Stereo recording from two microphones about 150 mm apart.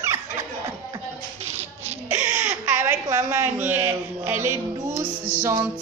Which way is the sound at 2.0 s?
15° right (ahead or behind).